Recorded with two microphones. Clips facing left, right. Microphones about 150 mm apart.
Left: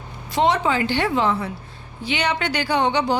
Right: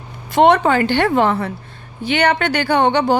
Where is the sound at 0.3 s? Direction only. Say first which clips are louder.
Right 7 dB; 55° right (ahead or behind).